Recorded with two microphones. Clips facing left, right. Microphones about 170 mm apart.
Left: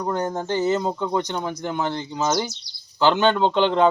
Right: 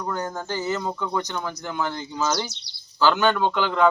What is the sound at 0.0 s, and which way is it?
Speech, 25° left (ahead or behind).